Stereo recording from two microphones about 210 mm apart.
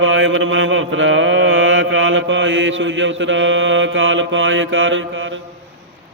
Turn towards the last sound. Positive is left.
turn(degrees=-65)  # may be behind; listen again after turning